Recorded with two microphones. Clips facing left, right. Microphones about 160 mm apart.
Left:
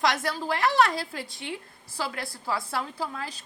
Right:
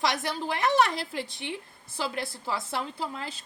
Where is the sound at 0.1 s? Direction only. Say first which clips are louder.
Left 2 dB; 20° right (ahead or behind).